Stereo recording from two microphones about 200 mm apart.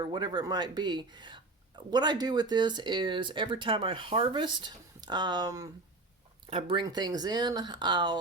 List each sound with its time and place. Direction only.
0.0 s speech: 20° right (ahead or behind)